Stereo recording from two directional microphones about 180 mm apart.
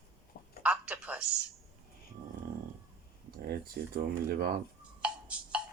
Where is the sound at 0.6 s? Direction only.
10° right (ahead or behind).